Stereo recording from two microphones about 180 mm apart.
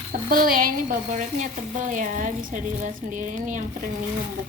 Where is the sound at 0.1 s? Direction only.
50° right (ahead or behind).